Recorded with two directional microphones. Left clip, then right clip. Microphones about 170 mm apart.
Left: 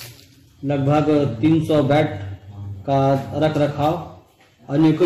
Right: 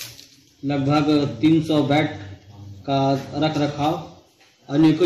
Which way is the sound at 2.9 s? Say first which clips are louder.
Left 3 dB; 20° left (ahead or behind).